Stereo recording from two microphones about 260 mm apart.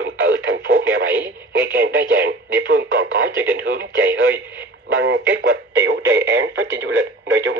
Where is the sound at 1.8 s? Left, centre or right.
Right.